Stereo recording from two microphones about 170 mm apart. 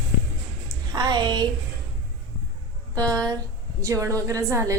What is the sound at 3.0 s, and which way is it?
Speech, 5° left (ahead or behind).